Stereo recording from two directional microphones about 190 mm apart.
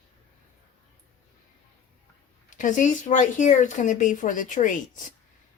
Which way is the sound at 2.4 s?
45° left (ahead or behind).